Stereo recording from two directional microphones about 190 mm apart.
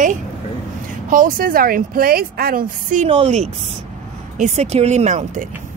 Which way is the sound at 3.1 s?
30° right (ahead or behind).